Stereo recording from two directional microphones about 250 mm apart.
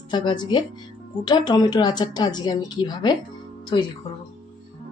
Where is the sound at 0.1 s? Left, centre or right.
Centre.